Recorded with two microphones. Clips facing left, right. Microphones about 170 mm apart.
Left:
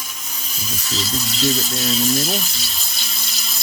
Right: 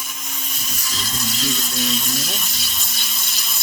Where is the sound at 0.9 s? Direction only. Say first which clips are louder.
Left 3 dB; 30° left (ahead or behind).